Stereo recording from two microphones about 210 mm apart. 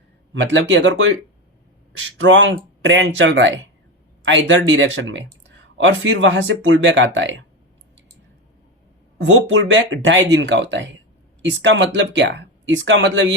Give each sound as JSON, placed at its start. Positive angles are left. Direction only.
{"t": 0.3, "sound": "speech", "side_deg": -60}
{"t": 9.1, "sound": "speech", "side_deg": -65}